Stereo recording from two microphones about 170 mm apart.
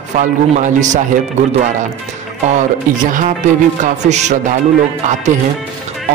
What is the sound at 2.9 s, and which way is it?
A man's voice, 50° right (ahead or behind).